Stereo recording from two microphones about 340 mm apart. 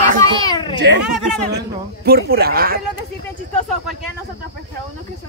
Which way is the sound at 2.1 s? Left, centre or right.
Right.